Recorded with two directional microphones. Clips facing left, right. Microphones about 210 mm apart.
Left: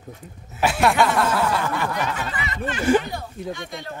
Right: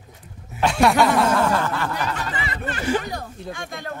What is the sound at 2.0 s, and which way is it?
Speech, 30° right (ahead or behind).